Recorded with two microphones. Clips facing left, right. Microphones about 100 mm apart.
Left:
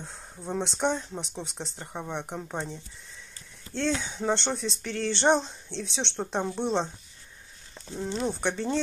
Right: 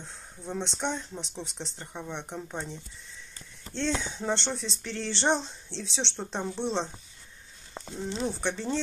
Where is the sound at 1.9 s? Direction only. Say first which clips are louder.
Left 3 dB; 30° left (ahead or behind).